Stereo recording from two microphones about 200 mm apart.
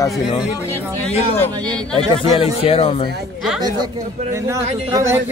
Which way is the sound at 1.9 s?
25° left (ahead or behind).